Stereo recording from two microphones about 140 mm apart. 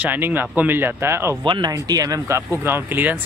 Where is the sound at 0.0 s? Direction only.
15° right (ahead or behind).